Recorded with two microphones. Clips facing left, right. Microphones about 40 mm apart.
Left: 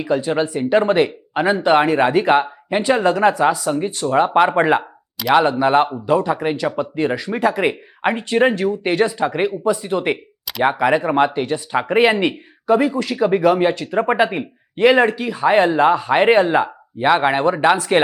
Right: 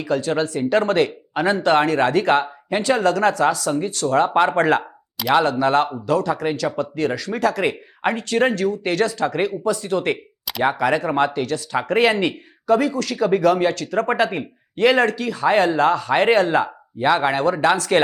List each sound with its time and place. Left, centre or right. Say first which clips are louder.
0.0 s speech: left 2 dB; centre